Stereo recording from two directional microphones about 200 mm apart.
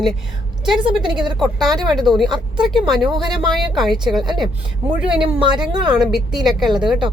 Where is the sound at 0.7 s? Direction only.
25° right (ahead or behind).